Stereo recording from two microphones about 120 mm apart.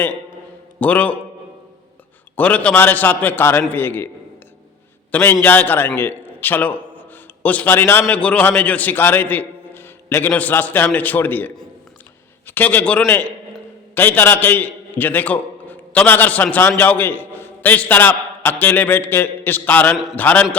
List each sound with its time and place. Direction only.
0.8 s a man's voice: 10° left (ahead or behind)
2.3 s a man's voice: 15° left (ahead or behind)
5.1 s a man's voice: 15° left (ahead or behind)